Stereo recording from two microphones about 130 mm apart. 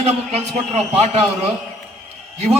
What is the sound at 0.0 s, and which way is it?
Speech, 55° right (ahead or behind).